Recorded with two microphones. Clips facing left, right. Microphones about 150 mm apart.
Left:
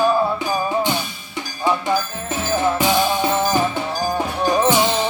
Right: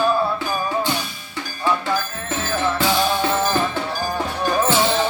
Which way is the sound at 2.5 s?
15° left (ahead or behind).